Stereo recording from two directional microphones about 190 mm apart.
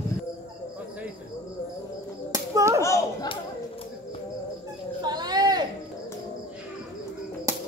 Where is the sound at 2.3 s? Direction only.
15° right (ahead or behind).